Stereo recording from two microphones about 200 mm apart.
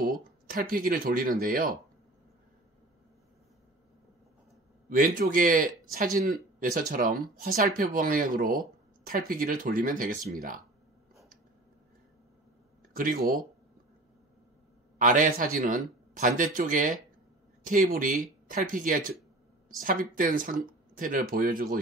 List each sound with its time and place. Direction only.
0.0 s speech: 45° right (ahead or behind)
4.8 s speech: 45° right (ahead or behind)
12.9 s speech: 45° right (ahead or behind)
15.0 s speech: 40° right (ahead or behind)